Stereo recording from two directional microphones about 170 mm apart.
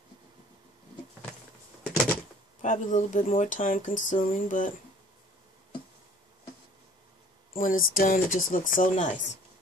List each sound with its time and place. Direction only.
2.6 s speech: 45° left (ahead or behind)
7.5 s speech: 55° left (ahead or behind)